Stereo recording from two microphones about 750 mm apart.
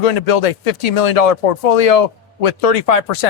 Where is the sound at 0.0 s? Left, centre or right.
Left.